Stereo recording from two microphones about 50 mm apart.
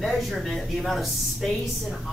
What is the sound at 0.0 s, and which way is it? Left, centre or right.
Speech, centre.